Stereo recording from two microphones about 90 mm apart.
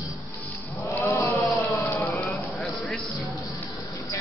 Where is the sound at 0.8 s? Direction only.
20° left (ahead or behind).